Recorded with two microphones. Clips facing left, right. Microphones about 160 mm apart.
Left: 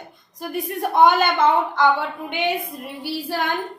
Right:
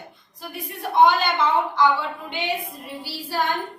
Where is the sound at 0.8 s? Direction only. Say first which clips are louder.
Left 1 dB; 45° left (ahead or behind).